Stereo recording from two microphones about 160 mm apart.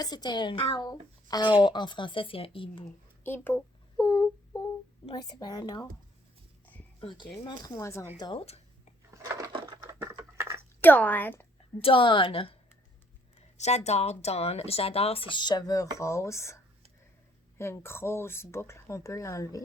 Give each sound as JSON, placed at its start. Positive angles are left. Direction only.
{"t": 0.0, "sound": "speech", "side_deg": 25}
{"t": 2.8, "sound": "speech", "side_deg": 10}
{"t": 7.0, "sound": "speech", "side_deg": 30}
{"t": 7.4, "sound": "speech", "side_deg": 20}
{"t": 8.2, "sound": "a sound", "side_deg": 35}
{"t": 9.8, "sound": "a sound", "side_deg": -15}
{"t": 10.8, "sound": "speech", "side_deg": 10}
{"t": 11.8, "sound": "speech", "side_deg": 35}
{"t": 13.6, "sound": "speech", "side_deg": 45}
{"t": 17.6, "sound": "speech", "side_deg": 15}